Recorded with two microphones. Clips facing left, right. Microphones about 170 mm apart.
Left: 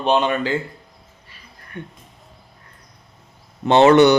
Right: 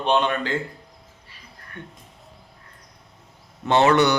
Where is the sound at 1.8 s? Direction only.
15° left (ahead or behind).